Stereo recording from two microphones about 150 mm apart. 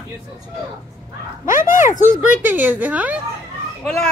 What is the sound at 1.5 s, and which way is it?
Speech, 65° left (ahead or behind).